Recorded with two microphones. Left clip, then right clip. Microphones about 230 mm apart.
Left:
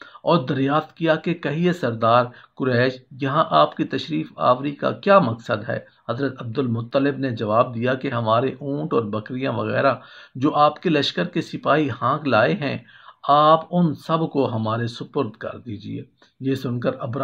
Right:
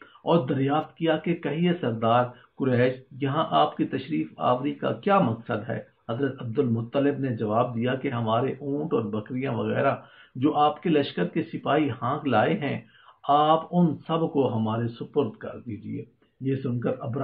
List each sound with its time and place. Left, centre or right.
0.2 s speech: left
16.4 s speech: left